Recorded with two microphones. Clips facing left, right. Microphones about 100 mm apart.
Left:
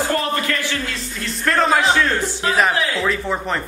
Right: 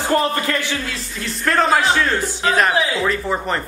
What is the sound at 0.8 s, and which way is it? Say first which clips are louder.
Speech: even; centre (ahead or behind).